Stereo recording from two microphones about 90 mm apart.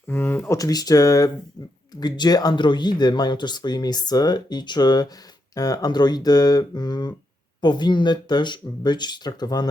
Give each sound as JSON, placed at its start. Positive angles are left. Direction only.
{"t": 0.1, "sound": "speech", "side_deg": 20}
{"t": 0.5, "sound": "speech", "side_deg": 45}
{"t": 2.0, "sound": "speech", "side_deg": 50}